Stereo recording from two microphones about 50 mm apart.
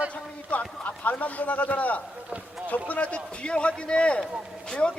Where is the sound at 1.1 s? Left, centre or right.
Left.